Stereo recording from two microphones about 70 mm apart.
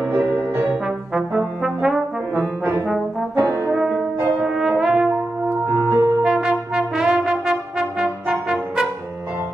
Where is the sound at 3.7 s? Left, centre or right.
Centre.